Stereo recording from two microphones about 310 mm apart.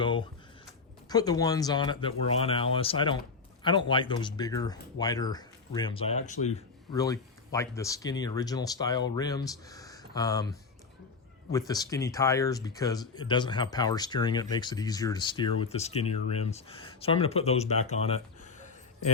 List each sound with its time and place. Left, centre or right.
0.0 s a sound: centre
1.1 s speech: centre
11.7 s speech: centre